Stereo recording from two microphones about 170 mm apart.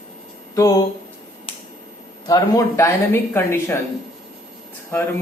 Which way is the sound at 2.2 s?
20° left (ahead or behind).